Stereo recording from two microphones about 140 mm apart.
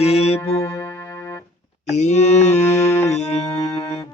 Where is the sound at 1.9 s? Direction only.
55° left (ahead or behind).